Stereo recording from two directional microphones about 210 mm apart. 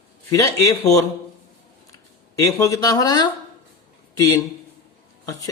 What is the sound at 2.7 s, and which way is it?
Speech, 15° left (ahead or behind).